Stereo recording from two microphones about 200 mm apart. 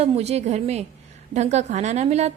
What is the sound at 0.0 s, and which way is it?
A woman's voice, 30° right (ahead or behind).